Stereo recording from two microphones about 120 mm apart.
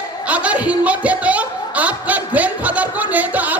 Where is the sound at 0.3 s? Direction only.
10° right (ahead or behind).